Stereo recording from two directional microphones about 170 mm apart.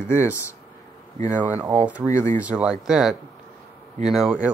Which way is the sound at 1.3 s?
10° right (ahead or behind).